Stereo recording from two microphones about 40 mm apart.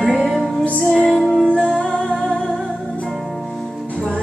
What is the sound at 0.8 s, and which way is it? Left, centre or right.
Music, centre.